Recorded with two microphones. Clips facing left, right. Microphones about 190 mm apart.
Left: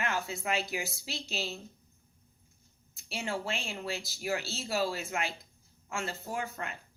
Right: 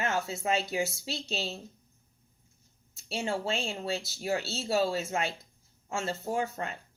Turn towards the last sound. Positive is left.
turn(degrees=-30)  # may be behind; listen again after turning